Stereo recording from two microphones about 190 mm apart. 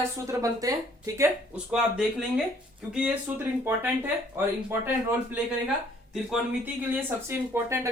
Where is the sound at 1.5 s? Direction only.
5° right (ahead or behind).